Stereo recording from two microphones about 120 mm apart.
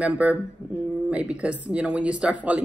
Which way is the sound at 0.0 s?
10° right (ahead or behind).